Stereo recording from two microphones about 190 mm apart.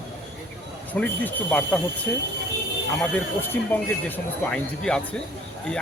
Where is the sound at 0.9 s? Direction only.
10° left (ahead or behind).